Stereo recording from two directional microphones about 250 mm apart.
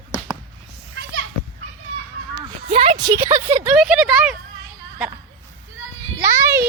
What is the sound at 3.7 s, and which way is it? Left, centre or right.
Speech, centre.